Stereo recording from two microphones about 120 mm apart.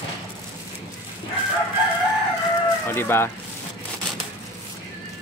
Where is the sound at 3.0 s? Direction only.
20° left (ahead or behind).